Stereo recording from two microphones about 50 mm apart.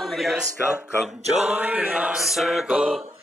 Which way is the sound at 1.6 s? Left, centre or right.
Right.